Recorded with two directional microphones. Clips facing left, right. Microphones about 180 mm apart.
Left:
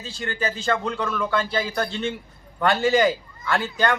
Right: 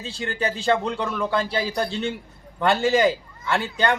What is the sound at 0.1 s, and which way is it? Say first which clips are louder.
A man's voice: right 1 dB; 30° right (ahead or behind).